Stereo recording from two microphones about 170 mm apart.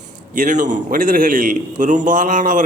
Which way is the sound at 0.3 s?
50° right (ahead or behind).